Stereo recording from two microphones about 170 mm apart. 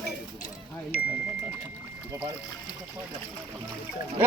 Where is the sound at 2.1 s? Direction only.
15° right (ahead or behind).